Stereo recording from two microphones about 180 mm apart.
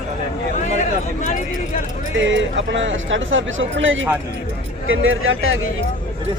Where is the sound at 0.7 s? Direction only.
40° left (ahead or behind).